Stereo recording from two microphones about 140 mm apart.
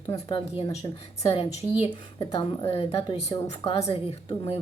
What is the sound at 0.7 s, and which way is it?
Speech, 50° left (ahead or behind).